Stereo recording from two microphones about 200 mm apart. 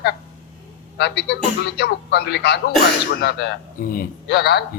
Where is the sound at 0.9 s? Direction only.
60° left (ahead or behind).